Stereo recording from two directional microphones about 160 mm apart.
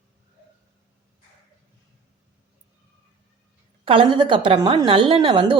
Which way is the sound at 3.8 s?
35° right (ahead or behind).